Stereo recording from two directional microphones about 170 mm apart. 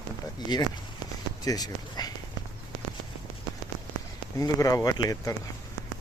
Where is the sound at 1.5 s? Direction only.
25° left (ahead or behind).